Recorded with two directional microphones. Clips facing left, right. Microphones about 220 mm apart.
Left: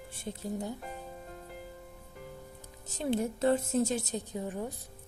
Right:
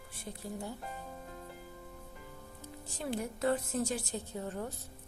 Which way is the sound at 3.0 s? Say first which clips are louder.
Left 6 dB; 25° left (ahead or behind).